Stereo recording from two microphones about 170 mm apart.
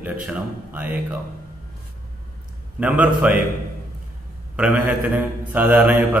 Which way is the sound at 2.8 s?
10° right (ahead or behind).